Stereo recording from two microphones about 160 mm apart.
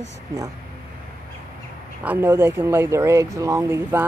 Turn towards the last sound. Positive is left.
turn(degrees=-15)  # may be behind; listen again after turning